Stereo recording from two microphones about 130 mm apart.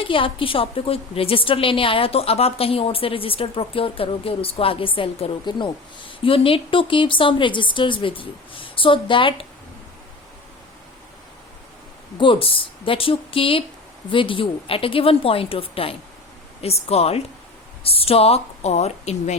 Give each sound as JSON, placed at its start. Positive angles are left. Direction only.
{"t": 0.0, "sound": "a woman's voice", "side_deg": 40}
{"t": 12.1, "sound": "a woman's voice", "side_deg": 40}